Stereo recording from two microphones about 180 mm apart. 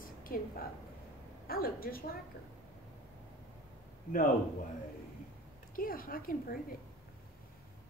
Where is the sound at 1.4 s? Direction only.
55° left (ahead or behind).